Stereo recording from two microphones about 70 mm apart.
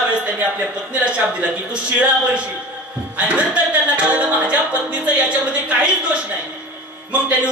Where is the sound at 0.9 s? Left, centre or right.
Centre.